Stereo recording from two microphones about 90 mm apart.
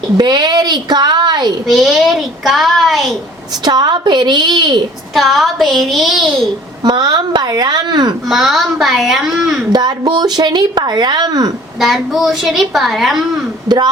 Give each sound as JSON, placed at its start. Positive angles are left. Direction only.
{"t": 0.2, "sound": "speech", "side_deg": -55}
{"t": 1.6, "sound": "a woman's voice", "side_deg": -5}
{"t": 3.6, "sound": "speech", "side_deg": -50}
{"t": 5.1, "sound": "a woman's voice", "side_deg": 0}
{"t": 6.8, "sound": "speech", "side_deg": -55}
{"t": 8.3, "sound": "a woman's voice", "side_deg": 0}
{"t": 9.7, "sound": "speech", "side_deg": -50}
{"t": 11.8, "sound": "a woman's voice", "side_deg": -5}
{"t": 13.7, "sound": "speech", "side_deg": -50}